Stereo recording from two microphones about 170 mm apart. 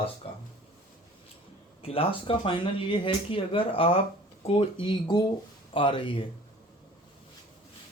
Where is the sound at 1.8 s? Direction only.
35° left (ahead or behind).